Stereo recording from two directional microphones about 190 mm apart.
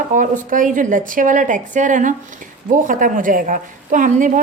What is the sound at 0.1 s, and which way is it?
A woman's voice, 45° right (ahead or behind).